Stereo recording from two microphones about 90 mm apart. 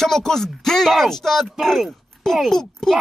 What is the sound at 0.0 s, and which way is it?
Speech, 5° left (ahead or behind).